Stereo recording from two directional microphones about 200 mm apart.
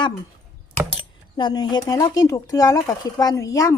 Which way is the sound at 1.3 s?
20° left (ahead or behind).